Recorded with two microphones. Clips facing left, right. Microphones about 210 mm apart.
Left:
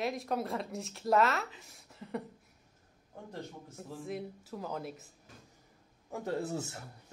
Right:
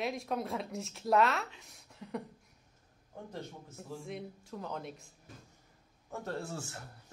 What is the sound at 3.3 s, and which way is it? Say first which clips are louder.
A woman's voice: left 2 dB; centre (ahead or behind).